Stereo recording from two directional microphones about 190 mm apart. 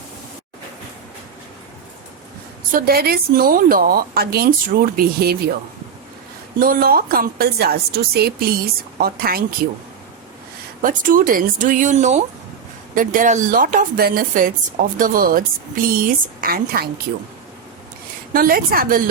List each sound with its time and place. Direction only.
2.7 s speech: 55° right (ahead or behind)
6.6 s speech: 50° right (ahead or behind)
10.8 s speech: 45° right (ahead or behind)
18.3 s speech: 50° right (ahead or behind)